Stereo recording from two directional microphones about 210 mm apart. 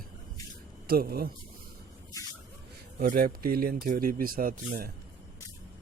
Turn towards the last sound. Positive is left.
turn(degrees=-45)  # may be behind; listen again after turning